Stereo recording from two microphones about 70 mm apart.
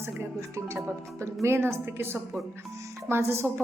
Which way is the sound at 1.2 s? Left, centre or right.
Right.